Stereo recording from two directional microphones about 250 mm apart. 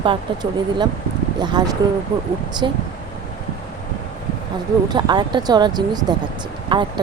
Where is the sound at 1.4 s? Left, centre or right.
Centre.